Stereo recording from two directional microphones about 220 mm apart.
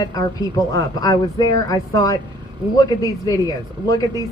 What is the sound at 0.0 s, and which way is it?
Speech, 15° left (ahead or behind).